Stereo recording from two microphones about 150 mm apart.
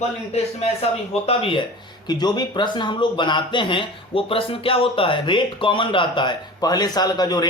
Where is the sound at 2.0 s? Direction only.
30° left (ahead or behind).